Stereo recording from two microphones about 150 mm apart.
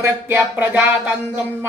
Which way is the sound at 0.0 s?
15° right (ahead or behind).